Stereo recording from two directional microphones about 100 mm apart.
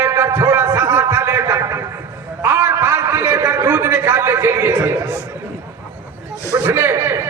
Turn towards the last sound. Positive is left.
turn(degrees=-25)  # may be behind; listen again after turning